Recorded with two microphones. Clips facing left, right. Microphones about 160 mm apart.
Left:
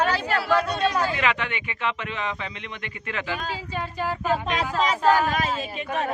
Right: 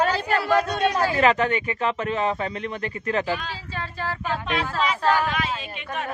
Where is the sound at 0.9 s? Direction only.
40° right (ahead or behind).